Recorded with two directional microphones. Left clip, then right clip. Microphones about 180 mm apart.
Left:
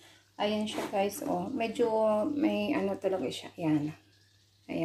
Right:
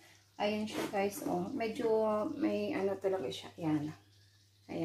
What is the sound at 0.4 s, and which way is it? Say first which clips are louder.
A woman's voice: left 3 dB; 30° left (ahead or behind).